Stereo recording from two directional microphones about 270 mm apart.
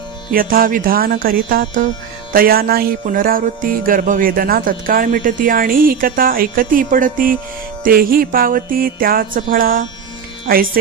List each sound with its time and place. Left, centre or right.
0.3 s music: right